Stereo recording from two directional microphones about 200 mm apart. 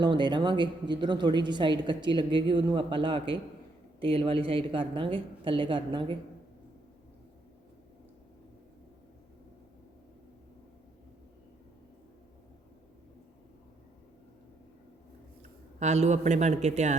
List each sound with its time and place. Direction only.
0.0 s a woman's voice: 20° right (ahead or behind)
15.8 s a man's voice: 35° right (ahead or behind)